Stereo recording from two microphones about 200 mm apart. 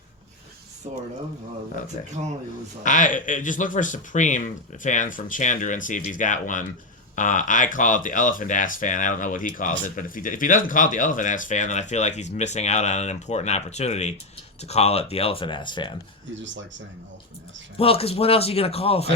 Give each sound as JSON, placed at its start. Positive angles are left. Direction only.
{"t": 0.9, "sound": "speech", "side_deg": -30}
{"t": 2.8, "sound": "speech", "side_deg": 40}
{"t": 17.7, "sound": "speech", "side_deg": 30}